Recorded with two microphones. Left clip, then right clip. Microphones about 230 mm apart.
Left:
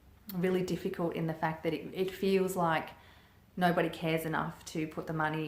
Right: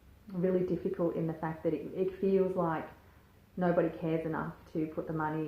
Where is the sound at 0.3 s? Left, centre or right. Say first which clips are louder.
Right 1 dB; left.